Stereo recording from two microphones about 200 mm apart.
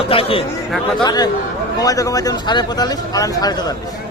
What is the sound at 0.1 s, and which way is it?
Speech, 25° left (ahead or behind).